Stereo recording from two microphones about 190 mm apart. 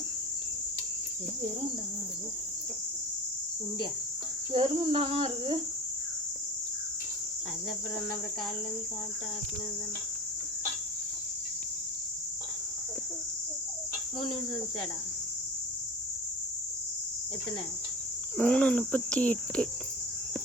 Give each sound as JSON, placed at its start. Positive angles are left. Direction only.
{"t": 4.5, "sound": "cricket", "side_deg": -30}
{"t": 18.3, "sound": "cricket", "side_deg": 5}